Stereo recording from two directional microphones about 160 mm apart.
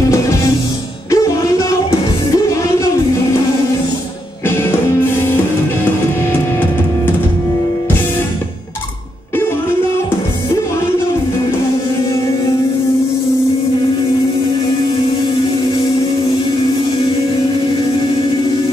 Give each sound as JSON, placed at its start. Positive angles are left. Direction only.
{"t": 1.1, "sound": "music", "side_deg": 20}
{"t": 4.5, "sound": "music", "side_deg": 15}